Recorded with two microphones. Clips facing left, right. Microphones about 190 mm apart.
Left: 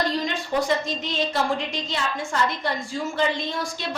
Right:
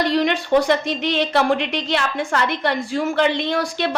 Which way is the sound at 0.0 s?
70° right (ahead or behind).